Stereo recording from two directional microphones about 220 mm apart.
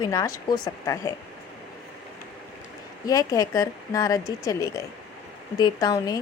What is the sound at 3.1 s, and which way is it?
Speech, 15° left (ahead or behind).